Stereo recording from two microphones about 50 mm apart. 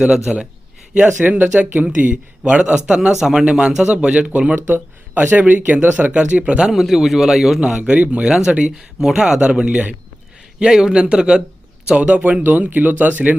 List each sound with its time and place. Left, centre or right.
0.1 s speech: centre
1.0 s speech: right
2.0 s a man's voice: right
3.8 s a man's voice: right
4.5 s speech: right
6.1 s a man's voice: right
6.7 s a man's voice: centre
7.9 s a man's voice: right
8.3 s a man's voice: centre
10.6 s a man's voice: centre; by 13.3 s right